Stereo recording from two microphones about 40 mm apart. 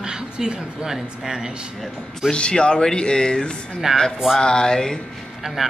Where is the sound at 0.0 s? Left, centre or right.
Centre.